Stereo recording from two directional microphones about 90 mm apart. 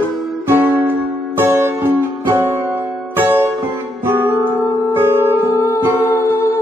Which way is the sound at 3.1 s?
25° right (ahead or behind).